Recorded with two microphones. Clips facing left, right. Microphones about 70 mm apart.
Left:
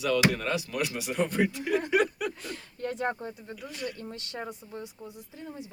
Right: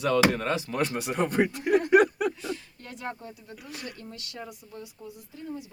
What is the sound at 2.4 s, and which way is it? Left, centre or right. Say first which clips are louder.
Speech: left 1 dB; left.